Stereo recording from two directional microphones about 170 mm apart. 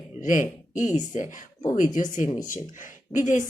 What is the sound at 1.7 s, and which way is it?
A woman's voice, 50° left (ahead or behind).